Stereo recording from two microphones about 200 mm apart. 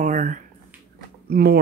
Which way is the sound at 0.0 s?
40° right (ahead or behind).